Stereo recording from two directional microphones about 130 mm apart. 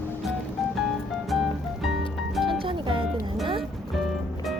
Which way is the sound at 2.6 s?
40° right (ahead or behind).